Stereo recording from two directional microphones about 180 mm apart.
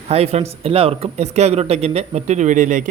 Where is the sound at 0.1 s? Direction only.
35° right (ahead or behind).